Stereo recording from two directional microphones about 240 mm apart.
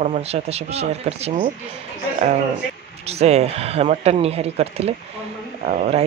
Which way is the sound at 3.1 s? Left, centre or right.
Right.